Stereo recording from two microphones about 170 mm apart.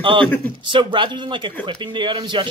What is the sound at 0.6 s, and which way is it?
Speech, 30° right (ahead or behind).